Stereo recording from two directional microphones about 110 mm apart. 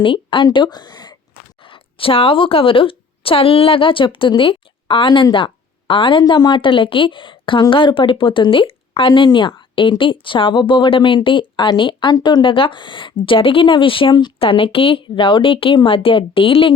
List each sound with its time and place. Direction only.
0.0 s speech: 50° left (ahead or behind)
1.6 s a woman's voice: 55° left (ahead or behind)